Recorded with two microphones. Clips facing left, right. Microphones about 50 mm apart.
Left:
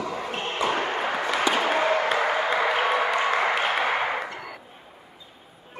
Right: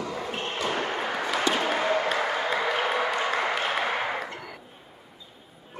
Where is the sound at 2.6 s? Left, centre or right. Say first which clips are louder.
Left 3 dB; left.